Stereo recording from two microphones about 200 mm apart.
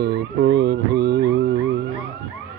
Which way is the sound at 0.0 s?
60° right (ahead or behind).